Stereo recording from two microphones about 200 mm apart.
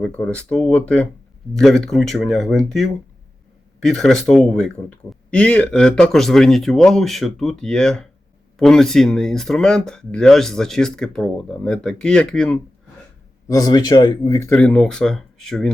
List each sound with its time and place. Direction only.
0.0 s speech: 5° left (ahead or behind)
3.8 s speech: centre (ahead or behind)
13.5 s speech: 20° left (ahead or behind); by 15.7 s centre (ahead or behind)